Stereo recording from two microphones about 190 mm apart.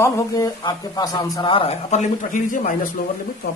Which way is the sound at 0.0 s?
15° left (ahead or behind).